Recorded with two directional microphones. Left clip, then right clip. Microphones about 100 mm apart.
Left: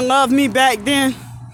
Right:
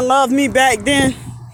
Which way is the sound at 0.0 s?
45° left (ahead or behind).